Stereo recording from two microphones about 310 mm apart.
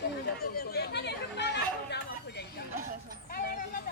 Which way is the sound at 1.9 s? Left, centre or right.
Left.